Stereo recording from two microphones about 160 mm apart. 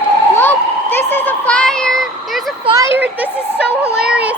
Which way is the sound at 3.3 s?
15° left (ahead or behind).